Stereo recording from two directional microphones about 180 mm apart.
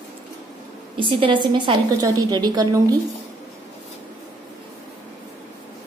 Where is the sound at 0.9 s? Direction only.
25° right (ahead or behind).